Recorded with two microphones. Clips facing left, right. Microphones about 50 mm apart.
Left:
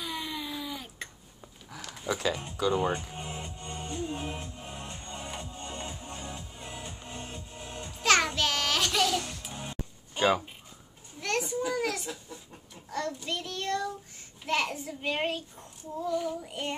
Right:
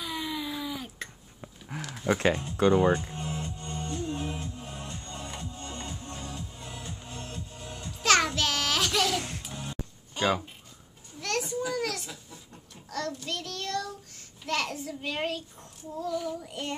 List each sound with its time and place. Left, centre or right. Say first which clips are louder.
0.0 s a sound: right 2 dB; centre
2.0 s speech: right 5 dB; right
2.9 s music: right 5 dB; centre
8.0 s music: right 1 dB; centre
8.4 s child singing: even; centre
9.4 s music: right 1 dB; centre
11.1 s children playing: even; centre
12.9 s child singing: even; centre